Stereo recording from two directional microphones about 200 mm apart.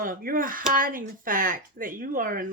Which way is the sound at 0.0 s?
45° right (ahead or behind).